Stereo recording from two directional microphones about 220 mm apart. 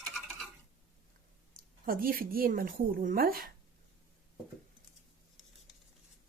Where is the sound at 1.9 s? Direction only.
40° right (ahead or behind).